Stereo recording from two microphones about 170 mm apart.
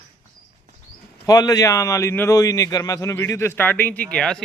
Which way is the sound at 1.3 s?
20° left (ahead or behind).